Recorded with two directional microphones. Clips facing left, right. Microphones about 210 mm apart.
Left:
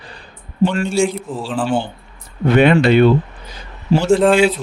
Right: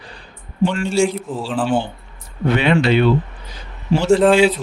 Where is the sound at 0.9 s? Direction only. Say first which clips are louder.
Even; centre (ahead or behind).